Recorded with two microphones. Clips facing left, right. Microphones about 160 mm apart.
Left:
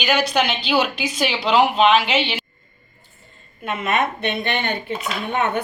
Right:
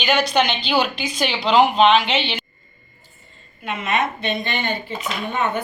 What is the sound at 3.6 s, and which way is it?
A woman's voice, 50° left (ahead or behind).